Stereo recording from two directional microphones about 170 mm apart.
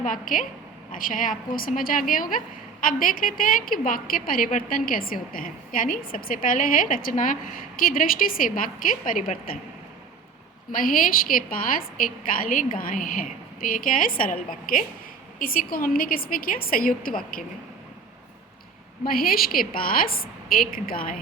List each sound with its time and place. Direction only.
0.0 s a woman's voice: 50° left (ahead or behind)
10.7 s a woman's voice: 55° left (ahead or behind)
19.0 s a woman's voice: 60° left (ahead or behind)